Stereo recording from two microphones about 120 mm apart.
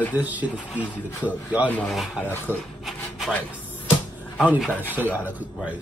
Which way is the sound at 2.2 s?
15° left (ahead or behind).